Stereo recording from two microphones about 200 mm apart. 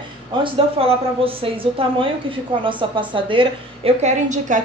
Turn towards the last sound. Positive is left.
turn(degrees=-35)  # may be behind; listen again after turning